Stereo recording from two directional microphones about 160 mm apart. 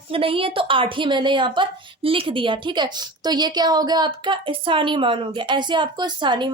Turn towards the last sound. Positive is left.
turn(degrees=-30)  # may be behind; listen again after turning